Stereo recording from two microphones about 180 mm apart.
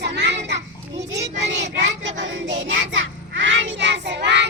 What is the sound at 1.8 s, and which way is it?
Child singing, 90° right.